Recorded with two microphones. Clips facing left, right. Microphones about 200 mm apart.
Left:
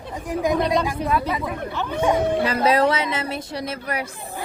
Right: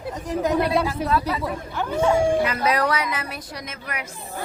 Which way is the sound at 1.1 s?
15° left (ahead or behind).